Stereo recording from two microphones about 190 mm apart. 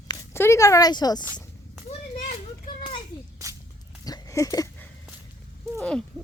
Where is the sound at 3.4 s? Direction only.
15° right (ahead or behind).